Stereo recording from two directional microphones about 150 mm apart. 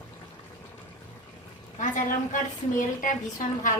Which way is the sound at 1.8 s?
60° left (ahead or behind).